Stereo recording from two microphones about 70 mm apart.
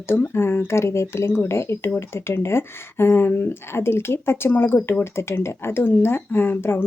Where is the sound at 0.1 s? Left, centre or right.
Left.